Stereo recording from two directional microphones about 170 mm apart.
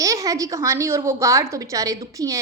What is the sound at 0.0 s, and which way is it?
A woman's voice, 20° right (ahead or behind).